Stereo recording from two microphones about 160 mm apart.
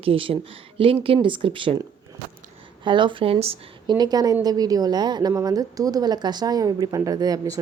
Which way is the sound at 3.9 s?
25° right (ahead or behind).